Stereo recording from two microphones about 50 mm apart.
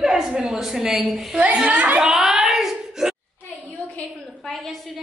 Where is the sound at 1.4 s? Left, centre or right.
Right.